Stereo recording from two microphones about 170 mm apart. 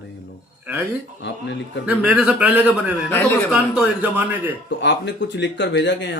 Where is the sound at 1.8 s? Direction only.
10° right (ahead or behind).